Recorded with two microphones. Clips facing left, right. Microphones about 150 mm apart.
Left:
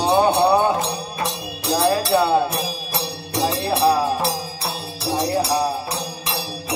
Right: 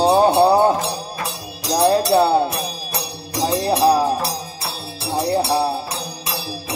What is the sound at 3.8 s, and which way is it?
Music, 35° right (ahead or behind).